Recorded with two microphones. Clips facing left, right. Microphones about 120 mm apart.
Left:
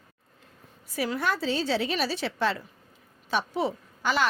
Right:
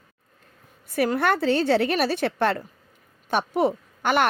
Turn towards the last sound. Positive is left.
turn(degrees=-55)  # may be behind; listen again after turning